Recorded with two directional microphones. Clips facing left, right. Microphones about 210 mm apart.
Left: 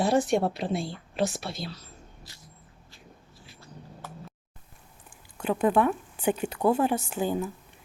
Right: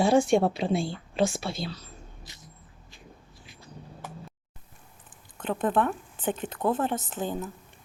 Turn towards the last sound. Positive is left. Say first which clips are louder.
# left 4 dB
turn(degrees=10)  # may be behind; listen again after turning